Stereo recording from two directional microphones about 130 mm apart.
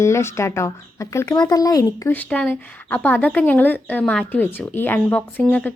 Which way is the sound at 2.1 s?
10° left (ahead or behind).